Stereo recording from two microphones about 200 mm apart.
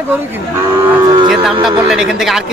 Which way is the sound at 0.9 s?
10° right (ahead or behind).